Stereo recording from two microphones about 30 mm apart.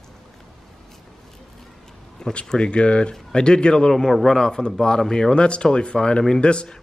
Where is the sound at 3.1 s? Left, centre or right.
Left.